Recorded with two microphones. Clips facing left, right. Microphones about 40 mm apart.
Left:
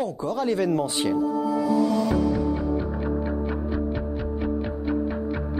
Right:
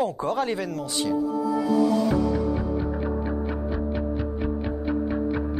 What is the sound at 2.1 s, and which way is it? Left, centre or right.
Music, centre.